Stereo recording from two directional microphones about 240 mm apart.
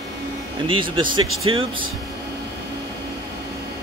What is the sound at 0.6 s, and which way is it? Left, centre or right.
Speech, right.